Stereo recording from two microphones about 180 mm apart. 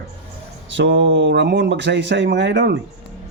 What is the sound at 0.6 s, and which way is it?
Speech, 90° right.